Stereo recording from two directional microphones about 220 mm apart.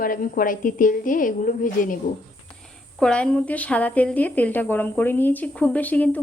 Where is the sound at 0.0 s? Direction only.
40° left (ahead or behind).